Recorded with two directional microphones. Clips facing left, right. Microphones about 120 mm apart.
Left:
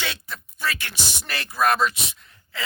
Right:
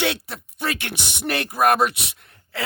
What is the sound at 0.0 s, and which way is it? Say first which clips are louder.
Speech: right 8 dB; 65° right (ahead or behind).